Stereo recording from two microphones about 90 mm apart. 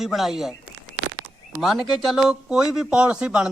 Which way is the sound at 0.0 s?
Centre (ahead or behind).